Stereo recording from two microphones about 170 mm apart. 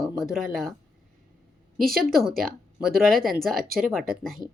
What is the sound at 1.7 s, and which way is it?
Speech, centre (ahead or behind).